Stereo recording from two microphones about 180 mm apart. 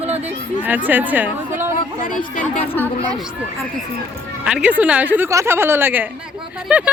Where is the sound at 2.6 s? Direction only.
10° left (ahead or behind).